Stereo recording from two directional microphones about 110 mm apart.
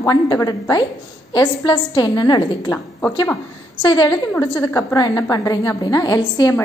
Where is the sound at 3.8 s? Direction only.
40° left (ahead or behind).